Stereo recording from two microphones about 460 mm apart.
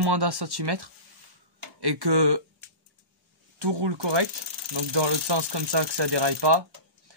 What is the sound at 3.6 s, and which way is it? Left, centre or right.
Speech, right.